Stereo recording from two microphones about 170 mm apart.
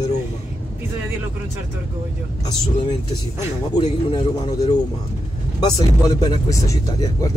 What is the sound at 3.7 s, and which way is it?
Speech, 30° left (ahead or behind).